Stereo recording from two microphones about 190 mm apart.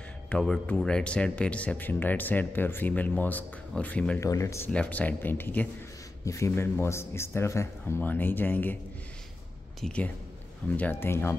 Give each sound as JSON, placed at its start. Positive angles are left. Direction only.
{"t": 0.3, "sound": "speech", "side_deg": 5}
{"t": 9.8, "sound": "speech", "side_deg": 5}